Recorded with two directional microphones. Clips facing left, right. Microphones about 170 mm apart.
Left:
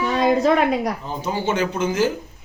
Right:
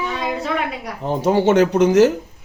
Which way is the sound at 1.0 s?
70° right (ahead or behind).